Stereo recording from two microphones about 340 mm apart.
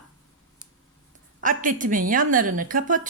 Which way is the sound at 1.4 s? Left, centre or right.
Right.